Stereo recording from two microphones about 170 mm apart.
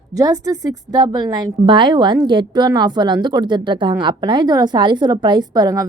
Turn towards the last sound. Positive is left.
turn(degrees=-25)  # may be behind; listen again after turning